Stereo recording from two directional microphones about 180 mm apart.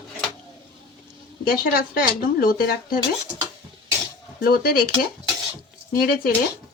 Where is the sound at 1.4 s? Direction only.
55° left (ahead or behind).